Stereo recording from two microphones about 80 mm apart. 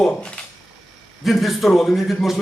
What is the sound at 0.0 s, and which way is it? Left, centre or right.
Speech, centre.